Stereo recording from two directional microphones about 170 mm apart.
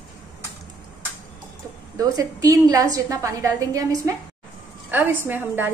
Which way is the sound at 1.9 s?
20° right (ahead or behind).